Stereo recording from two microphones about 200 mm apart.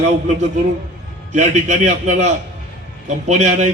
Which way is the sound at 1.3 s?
35° right (ahead or behind).